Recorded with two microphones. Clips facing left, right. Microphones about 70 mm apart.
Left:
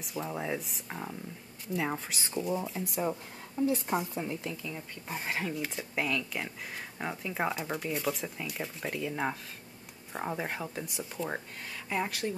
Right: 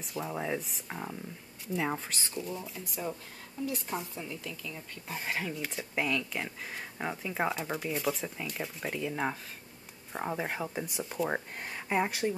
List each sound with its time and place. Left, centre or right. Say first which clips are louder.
0.0 s speech: even; centre
3.6 s a woman's voice: left 6 dB; left
4.6 s speech: left 2 dB; centre
11.2 s speech: right 3 dB; right